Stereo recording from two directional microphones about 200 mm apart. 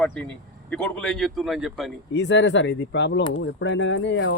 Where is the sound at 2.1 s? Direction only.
65° left (ahead or behind).